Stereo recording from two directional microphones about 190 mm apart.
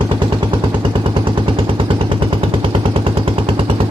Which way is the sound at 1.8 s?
25° right (ahead or behind).